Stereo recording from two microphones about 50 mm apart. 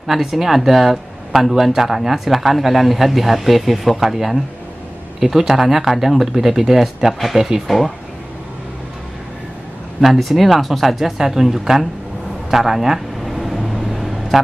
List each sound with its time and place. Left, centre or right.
0.0 s speech: centre
9.9 s speech: centre
12.4 s vehicle: centre